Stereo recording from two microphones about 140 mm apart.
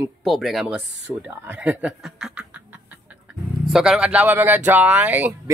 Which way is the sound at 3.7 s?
5° right (ahead or behind).